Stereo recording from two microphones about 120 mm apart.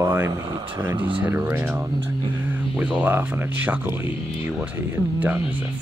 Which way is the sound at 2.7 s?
10° right (ahead or behind).